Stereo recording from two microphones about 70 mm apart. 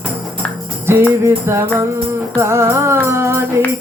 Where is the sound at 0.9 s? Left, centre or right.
Right.